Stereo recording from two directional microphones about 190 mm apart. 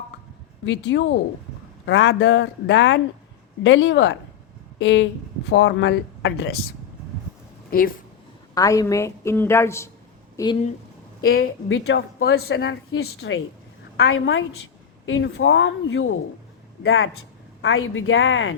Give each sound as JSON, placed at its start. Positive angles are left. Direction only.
{"t": 0.6, "sound": "speech", "side_deg": 70}
{"t": 7.7, "sound": "speech", "side_deg": 50}
{"t": 8.5, "sound": "a woman's voice", "side_deg": 20}
{"t": 11.4, "sound": "a woman's voice", "side_deg": 80}